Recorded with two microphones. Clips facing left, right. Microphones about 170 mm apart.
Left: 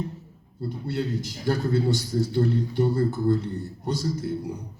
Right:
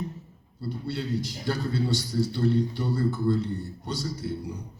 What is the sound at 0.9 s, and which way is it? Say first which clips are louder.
Speech: left 2 dB; 50° left (ahead or behind).